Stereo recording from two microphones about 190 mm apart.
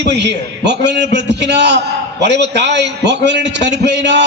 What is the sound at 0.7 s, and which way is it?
A man's voice, 65° right (ahead or behind).